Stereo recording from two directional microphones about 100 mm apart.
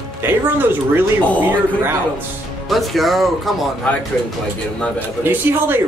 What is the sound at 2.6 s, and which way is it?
Speech, centre (ahead or behind).